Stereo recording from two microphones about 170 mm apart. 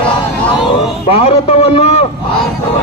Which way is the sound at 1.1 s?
35° left (ahead or behind).